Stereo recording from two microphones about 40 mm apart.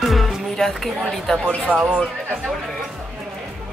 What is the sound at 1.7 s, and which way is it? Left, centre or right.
Speech, right.